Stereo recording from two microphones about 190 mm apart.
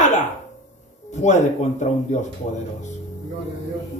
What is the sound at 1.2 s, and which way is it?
Speech, 40° left (ahead or behind).